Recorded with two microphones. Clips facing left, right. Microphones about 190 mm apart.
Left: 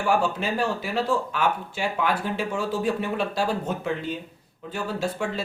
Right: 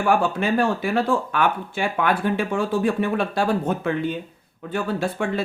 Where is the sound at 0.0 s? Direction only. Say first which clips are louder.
Right 3 dB; 55° right (ahead or behind).